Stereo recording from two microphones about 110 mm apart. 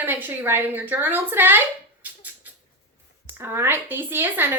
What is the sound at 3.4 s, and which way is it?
A woman's voice, 20° right (ahead or behind).